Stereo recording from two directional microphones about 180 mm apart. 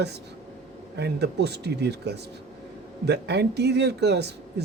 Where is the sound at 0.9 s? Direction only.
70° right (ahead or behind).